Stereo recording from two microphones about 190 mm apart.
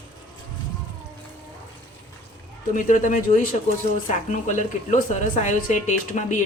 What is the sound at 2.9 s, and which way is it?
A woman's voice, 40° left (ahead or behind).